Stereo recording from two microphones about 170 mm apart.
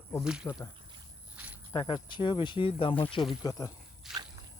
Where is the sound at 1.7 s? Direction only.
30° left (ahead or behind).